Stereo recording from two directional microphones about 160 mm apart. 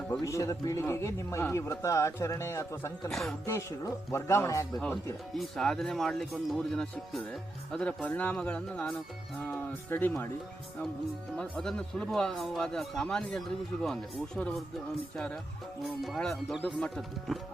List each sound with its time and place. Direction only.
0.1 s a man's voice: 20° left (ahead or behind)
3.1 s speech: centre (ahead or behind)
3.4 s speech: 20° left (ahead or behind)
5.3 s a man's voice: centre (ahead or behind)
11.3 s speech: 5° left (ahead or behind)
16.0 s speech: 5° left (ahead or behind)